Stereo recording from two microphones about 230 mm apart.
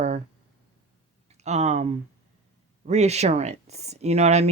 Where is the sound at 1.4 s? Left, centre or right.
Right.